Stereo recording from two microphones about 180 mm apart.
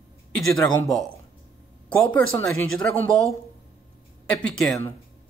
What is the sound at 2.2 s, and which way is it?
Speech, 15° left (ahead or behind).